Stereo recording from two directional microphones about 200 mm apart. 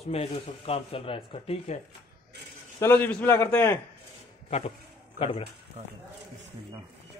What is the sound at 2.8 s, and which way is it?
A man's voice, 10° left (ahead or behind).